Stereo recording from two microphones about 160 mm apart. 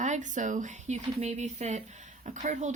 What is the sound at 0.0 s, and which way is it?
Speech, 50° right (ahead or behind).